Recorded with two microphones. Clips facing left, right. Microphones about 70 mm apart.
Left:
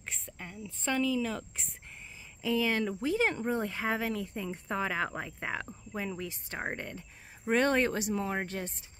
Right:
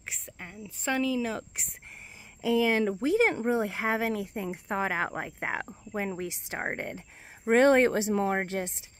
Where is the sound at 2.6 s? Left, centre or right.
Centre.